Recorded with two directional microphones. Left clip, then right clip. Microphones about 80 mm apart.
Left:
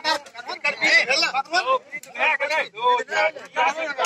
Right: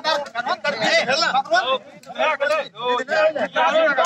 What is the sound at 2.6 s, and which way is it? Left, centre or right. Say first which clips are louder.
Speech: left 2 dB; right.